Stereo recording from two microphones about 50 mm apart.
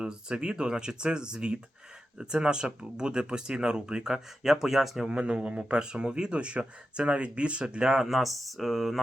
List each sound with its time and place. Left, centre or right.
0.0 s speech: centre
5.1 s speech: centre